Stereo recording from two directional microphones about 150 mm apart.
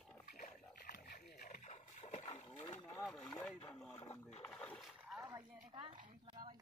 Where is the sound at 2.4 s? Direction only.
40° left (ahead or behind).